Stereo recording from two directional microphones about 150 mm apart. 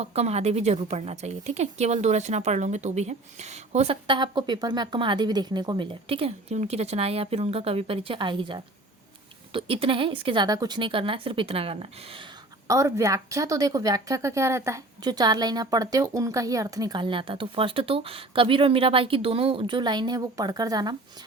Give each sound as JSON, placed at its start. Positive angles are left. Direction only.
{"t": 0.0, "sound": "a woman's voice", "side_deg": -45}
{"t": 4.0, "sound": "a woman's voice", "side_deg": -30}
{"t": 12.6, "sound": "a woman's voice", "side_deg": -20}